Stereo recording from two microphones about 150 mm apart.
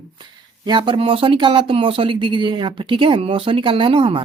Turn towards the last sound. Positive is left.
turn(degrees=-35)  # may be behind; listen again after turning